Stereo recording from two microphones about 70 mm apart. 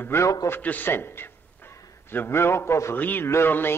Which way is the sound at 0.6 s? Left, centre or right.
Left.